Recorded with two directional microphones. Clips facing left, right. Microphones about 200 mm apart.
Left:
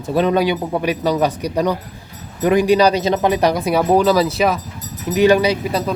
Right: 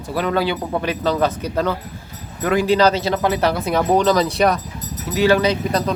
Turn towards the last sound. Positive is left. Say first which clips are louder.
# left 2 dB
turn(degrees=10)  # may be behind; listen again after turning